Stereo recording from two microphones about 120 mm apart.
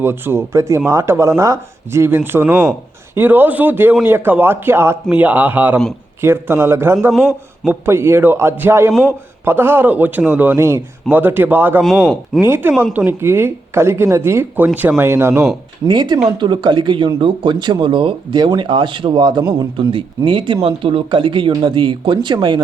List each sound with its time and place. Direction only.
0.0 s a man's voice: 20° right (ahead or behind)
7.1 s a man's voice: centre (ahead or behind)
7.6 s speech: 20° right (ahead or behind)
8.9 s a man's voice: 5° left (ahead or behind)
9.4 s a man's voice: 20° right (ahead or behind)
15.9 s speech: 35° right (ahead or behind)